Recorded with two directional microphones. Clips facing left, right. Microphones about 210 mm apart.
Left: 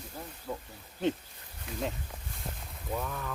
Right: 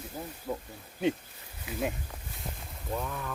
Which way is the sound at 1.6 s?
5° right (ahead or behind).